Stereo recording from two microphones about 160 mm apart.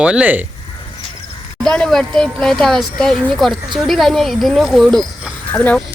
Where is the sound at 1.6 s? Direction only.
5° left (ahead or behind).